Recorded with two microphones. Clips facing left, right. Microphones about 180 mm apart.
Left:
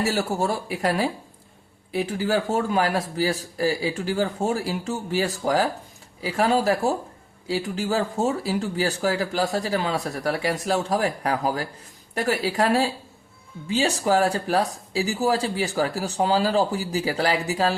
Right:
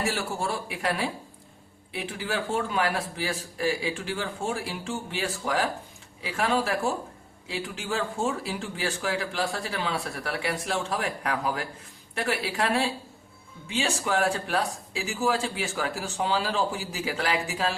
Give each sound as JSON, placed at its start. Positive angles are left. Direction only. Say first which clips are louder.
{"t": 0.0, "sound": "speech", "louder": "left 6 dB", "side_deg": 40}